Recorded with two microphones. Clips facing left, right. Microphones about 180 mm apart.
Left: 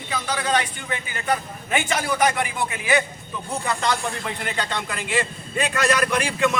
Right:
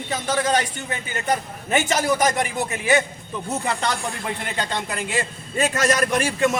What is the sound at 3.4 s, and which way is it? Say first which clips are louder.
Speech: right 1 dB; 25° right (ahead or behind).